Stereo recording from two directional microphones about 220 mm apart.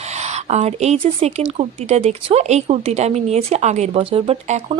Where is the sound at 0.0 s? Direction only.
30° right (ahead or behind).